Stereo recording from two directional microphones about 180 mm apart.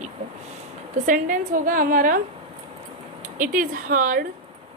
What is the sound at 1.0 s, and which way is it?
A woman's voice, 50° right (ahead or behind).